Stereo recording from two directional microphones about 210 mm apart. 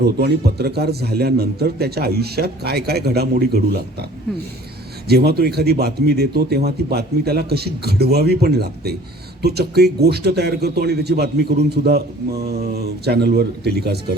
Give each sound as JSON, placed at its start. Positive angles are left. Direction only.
{"t": 0.0, "sound": "a man's voice", "side_deg": -50}
{"t": 5.0, "sound": "a man's voice", "side_deg": -50}